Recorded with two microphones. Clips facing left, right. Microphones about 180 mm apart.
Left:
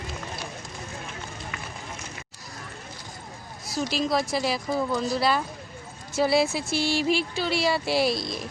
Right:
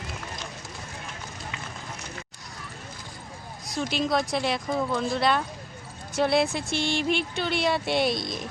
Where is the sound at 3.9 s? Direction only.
Centre (ahead or behind).